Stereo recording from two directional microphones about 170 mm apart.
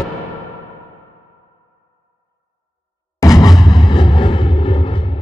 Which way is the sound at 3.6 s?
25° left (ahead or behind).